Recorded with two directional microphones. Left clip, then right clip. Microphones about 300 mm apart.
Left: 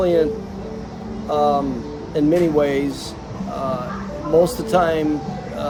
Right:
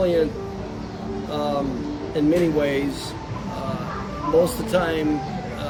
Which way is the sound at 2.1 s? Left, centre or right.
Centre.